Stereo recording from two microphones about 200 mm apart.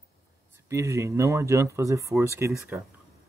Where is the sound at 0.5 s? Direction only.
15° right (ahead or behind).